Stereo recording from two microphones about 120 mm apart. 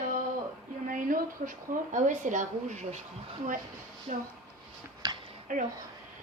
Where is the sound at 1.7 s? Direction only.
90° right.